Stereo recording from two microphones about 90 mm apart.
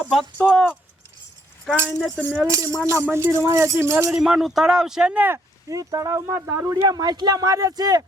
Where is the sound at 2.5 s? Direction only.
35° right (ahead or behind).